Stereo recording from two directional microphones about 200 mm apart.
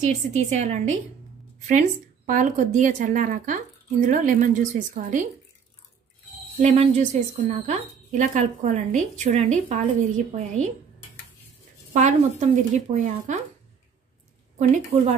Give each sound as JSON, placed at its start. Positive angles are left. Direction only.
{"t": 0.0, "sound": "speech", "side_deg": -35}
{"t": 6.6, "sound": "speech", "side_deg": -35}
{"t": 11.9, "sound": "speech", "side_deg": -35}